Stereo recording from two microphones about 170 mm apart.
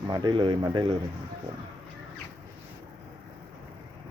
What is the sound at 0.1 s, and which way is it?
Speech, 25° right (ahead or behind).